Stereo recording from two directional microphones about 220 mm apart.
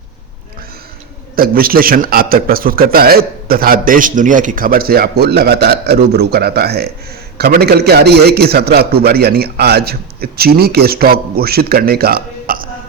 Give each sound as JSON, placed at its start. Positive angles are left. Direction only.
{"t": 1.4, "sound": "a man's voice", "side_deg": -40}